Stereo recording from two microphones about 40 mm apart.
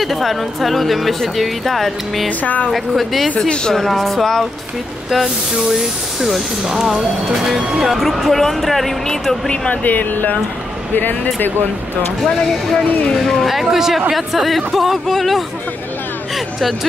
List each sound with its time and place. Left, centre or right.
0.0 s speech: centre
2.2 s speech: left
2.7 s speech: centre
3.3 s speech: left
3.7 s speech: centre
5.1 s speech: centre
9.7 s speech: left
13.1 s speech: centre